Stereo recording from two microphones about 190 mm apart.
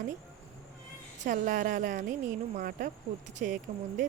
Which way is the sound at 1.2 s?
45° right (ahead or behind).